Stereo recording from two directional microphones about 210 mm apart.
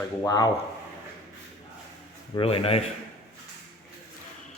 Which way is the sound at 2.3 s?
25° left (ahead or behind).